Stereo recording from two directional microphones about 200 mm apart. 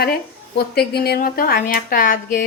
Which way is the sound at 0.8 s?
50° left (ahead or behind).